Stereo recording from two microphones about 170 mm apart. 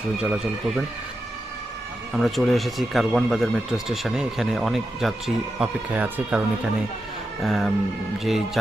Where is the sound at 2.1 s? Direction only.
Centre (ahead or behind).